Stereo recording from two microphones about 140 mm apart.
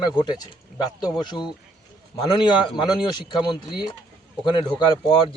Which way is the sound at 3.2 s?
35° left (ahead or behind).